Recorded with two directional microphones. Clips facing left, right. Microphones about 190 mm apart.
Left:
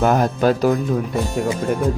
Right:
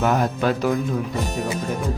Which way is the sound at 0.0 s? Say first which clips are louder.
Left 4 dB; 40° left (ahead or behind).